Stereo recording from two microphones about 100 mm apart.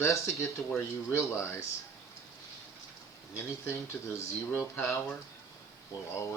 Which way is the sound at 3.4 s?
30° left (ahead or behind).